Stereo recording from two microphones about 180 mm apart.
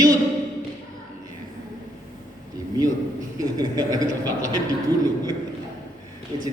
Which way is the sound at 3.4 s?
20° right (ahead or behind).